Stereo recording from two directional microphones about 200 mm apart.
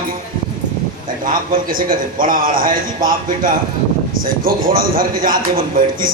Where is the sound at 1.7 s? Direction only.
45° right (ahead or behind).